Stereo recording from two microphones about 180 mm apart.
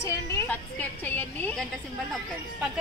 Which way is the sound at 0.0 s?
15° left (ahead or behind).